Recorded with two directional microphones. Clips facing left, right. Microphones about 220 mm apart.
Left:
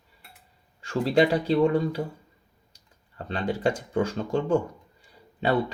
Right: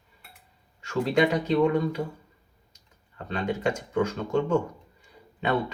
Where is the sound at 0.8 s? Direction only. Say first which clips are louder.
Left 1 dB; 30° left (ahead or behind).